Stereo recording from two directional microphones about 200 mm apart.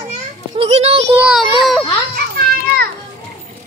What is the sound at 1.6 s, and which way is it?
Baby cry, centre (ahead or behind).